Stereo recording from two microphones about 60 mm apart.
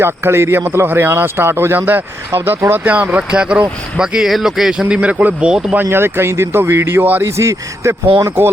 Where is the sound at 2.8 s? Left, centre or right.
Right; by 4.9 s centre.